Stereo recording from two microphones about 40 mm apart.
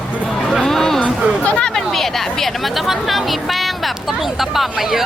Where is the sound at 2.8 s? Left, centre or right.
Centre.